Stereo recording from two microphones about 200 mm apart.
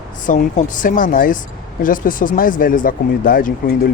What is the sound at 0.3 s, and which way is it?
Speech, 40° left (ahead or behind).